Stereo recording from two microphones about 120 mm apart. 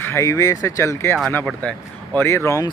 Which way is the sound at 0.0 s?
25° left (ahead or behind).